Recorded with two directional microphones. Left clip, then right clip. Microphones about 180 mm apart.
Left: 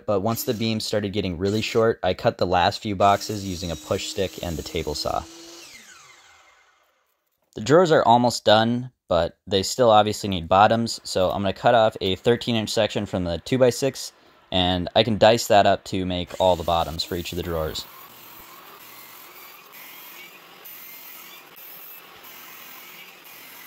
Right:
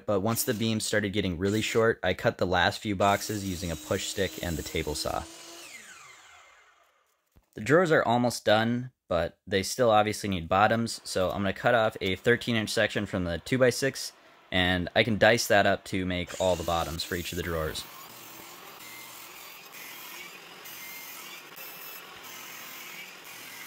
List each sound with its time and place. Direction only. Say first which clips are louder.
0.0 s speech: left 5 dB; 10° left (ahead or behind)
7.7 s speech: left 7 dB; 25° left (ahead or behind)